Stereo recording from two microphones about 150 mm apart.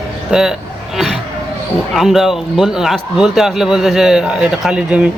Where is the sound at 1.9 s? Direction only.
Centre (ahead or behind).